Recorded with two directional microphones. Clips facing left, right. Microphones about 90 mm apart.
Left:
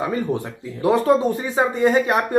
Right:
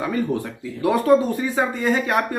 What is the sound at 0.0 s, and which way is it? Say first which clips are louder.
Speech: even; 25° left (ahead or behind).